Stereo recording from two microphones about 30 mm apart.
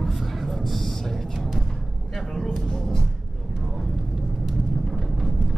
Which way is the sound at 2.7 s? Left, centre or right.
Left.